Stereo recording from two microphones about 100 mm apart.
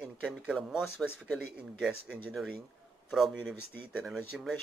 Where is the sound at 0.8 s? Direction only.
20° left (ahead or behind).